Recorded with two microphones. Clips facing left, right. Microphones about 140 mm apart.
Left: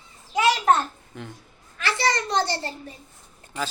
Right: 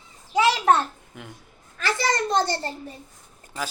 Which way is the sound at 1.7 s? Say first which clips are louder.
Even; 45° right (ahead or behind).